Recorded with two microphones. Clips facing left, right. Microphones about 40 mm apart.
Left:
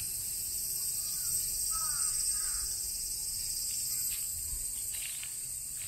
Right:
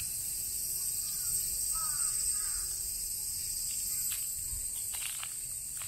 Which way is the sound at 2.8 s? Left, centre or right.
Centre.